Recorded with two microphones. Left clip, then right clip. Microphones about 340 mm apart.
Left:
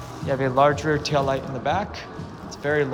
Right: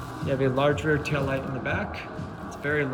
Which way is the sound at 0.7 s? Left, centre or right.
Left.